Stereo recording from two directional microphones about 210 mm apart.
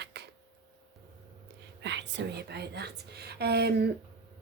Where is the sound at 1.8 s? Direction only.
60° right (ahead or behind).